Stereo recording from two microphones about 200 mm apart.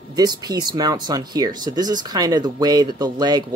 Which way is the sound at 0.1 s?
20° right (ahead or behind).